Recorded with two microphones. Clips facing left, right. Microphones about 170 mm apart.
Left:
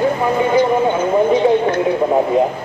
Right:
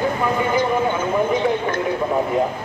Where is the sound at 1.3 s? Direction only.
20° left (ahead or behind).